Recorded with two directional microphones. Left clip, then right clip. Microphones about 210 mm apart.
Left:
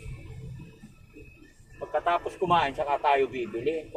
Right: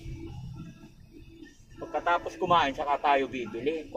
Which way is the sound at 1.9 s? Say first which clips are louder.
Left 1 dB; 10° left (ahead or behind).